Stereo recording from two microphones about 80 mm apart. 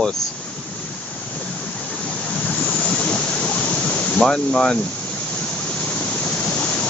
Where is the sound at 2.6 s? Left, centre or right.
Centre.